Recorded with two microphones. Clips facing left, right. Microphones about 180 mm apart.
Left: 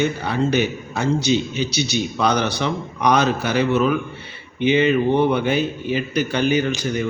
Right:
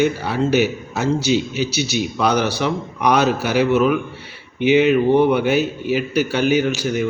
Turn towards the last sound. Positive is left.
turn(degrees=-10)  # may be behind; listen again after turning